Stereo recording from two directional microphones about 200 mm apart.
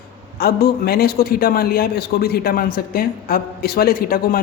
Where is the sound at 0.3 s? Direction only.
50° left (ahead or behind).